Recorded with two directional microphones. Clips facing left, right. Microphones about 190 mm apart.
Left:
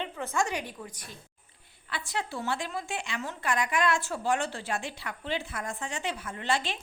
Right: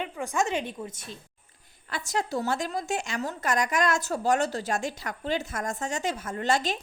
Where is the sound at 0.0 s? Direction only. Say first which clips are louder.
Right 2 dB; 15° right (ahead or behind).